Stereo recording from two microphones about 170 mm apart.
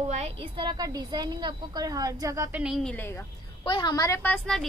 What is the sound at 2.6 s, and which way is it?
Speech, centre (ahead or behind).